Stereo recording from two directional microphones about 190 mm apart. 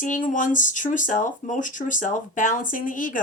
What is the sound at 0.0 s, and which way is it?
Speech, 45° left (ahead or behind).